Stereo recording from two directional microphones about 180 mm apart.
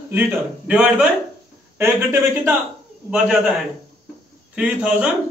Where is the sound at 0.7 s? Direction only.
5° right (ahead or behind).